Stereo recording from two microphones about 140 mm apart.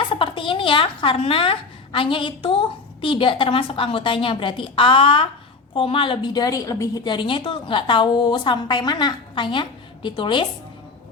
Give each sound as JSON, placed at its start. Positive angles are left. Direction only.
{"t": 0.0, "sound": "a woman's voice", "side_deg": 40}